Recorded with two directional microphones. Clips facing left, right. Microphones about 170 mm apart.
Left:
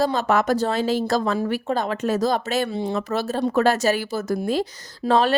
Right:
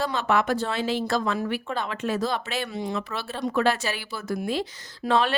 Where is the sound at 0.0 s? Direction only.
40° left (ahead or behind).